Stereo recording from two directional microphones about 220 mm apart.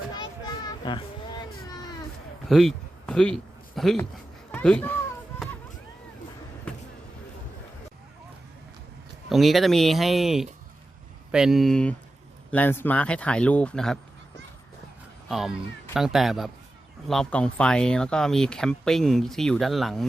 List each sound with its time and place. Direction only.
0.2 s child singing: 20° left (ahead or behind)
2.5 s a sound: centre (ahead or behind)
4.5 s a child's voice: 5° left (ahead or behind)
6.7 s a sound: 5° left (ahead or behind)
9.3 s speech: centre (ahead or behind)
15.3 s speech: centre (ahead or behind)